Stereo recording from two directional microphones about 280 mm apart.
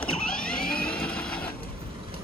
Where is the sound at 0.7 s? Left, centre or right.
Centre.